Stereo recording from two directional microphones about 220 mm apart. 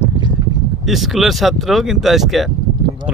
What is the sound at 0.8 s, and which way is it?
Speech, centre (ahead or behind).